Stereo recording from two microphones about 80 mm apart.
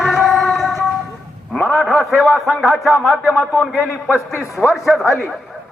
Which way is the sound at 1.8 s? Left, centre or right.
Centre.